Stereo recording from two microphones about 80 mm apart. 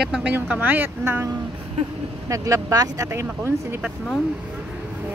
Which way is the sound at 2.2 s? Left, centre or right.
Right.